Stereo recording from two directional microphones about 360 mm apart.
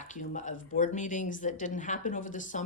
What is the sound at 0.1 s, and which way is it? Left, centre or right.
Speech, left.